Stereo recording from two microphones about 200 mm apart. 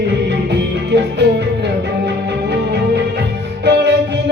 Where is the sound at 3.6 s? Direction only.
55° right (ahead or behind).